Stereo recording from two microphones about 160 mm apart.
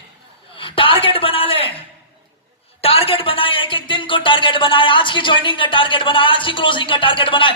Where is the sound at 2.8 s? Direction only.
35° left (ahead or behind).